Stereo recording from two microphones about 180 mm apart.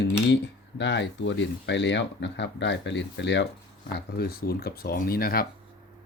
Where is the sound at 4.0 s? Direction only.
60° left (ahead or behind).